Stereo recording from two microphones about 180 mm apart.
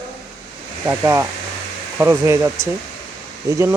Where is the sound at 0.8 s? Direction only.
15° right (ahead or behind).